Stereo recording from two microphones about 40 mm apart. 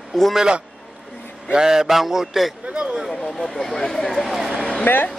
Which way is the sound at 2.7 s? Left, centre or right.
Right.